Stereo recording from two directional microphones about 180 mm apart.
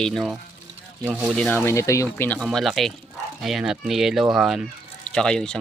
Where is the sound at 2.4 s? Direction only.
Centre (ahead or behind).